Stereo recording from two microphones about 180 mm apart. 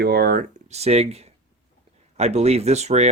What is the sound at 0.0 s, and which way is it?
Speech, 60° right (ahead or behind).